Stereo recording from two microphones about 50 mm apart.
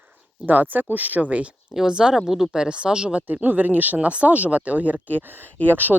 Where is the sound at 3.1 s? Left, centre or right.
Right.